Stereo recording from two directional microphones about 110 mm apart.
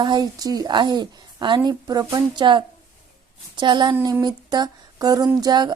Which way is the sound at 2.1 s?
45° right (ahead or behind).